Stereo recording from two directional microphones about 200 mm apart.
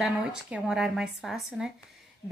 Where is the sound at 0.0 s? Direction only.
5° right (ahead or behind).